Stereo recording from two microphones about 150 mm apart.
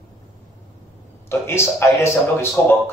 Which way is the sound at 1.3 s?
15° left (ahead or behind).